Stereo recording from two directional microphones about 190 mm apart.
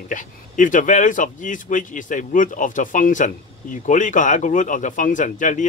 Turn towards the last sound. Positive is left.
turn(degrees=40)  # may be behind; listen again after turning